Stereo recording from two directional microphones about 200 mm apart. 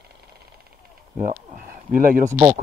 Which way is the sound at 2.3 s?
15° right (ahead or behind).